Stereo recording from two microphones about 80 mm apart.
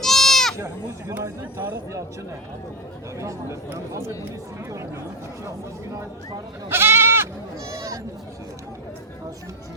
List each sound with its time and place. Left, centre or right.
0.0 s goat: centre
1.2 s speech: right
3.2 s speech: right
6.7 s speech: right